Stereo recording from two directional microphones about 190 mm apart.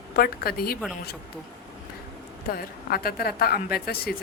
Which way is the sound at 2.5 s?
55° left (ahead or behind).